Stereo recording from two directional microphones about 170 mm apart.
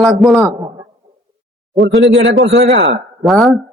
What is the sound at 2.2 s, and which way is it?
Speech, 75° right (ahead or behind).